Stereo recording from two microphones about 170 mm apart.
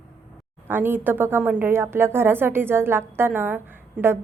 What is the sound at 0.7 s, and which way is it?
A woman's voice, 10° right (ahead or behind).